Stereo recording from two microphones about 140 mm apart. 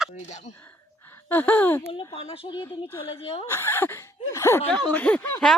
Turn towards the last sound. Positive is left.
turn(degrees=10)  # may be behind; listen again after turning